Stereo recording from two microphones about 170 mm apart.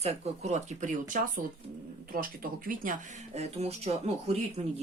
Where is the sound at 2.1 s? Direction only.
55° right (ahead or behind); by 4.7 s 30° right (ahead or behind).